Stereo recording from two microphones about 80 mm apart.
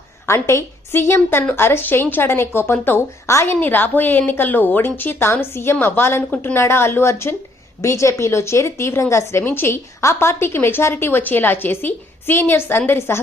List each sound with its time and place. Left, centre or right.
0.3 s a woman's voice: left
9.4 s a woman's voice: left